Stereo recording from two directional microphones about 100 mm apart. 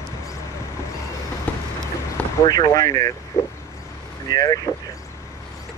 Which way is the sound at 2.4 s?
45° left (ahead or behind).